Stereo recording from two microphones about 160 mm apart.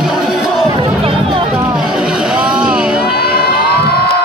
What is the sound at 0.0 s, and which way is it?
Music, 5° right (ahead or behind).